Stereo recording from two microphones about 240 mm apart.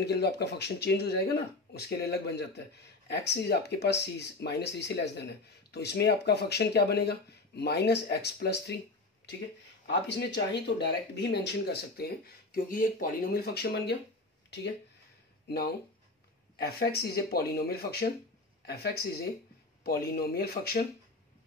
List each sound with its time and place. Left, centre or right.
0.0 s speech: left
10.0 s speech: left
15.4 s speech: left